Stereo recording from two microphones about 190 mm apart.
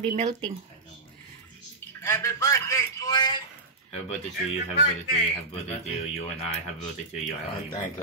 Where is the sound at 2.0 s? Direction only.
15° left (ahead or behind).